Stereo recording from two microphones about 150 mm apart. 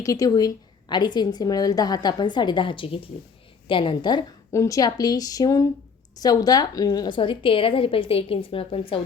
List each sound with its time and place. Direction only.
0.0 s a woman's voice: 25° left (ahead or behind)